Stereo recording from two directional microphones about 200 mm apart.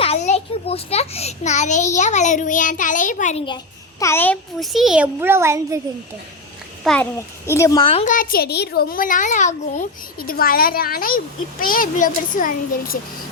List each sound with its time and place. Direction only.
0.0 s a child's voice: 35° left (ahead or behind)
4.0 s a child's voice: 10° left (ahead or behind); by 5.8 s 15° right (ahead or behind)
6.8 s a child's voice: 5° left (ahead or behind); by 8.0 s 25° left (ahead or behind)
8.0 s a child's voice: 45° left (ahead or behind)